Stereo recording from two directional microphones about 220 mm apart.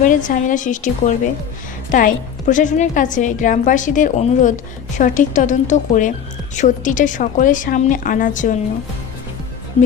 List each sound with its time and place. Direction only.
0.0 s a woman's voice: 35° left (ahead or behind)